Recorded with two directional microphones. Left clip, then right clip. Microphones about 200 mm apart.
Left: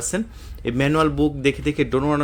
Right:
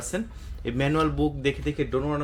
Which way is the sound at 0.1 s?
35° left (ahead or behind).